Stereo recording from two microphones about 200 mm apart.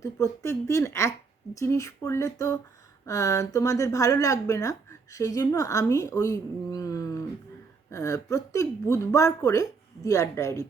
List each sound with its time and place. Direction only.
0.0 s speech: 15° left (ahead or behind)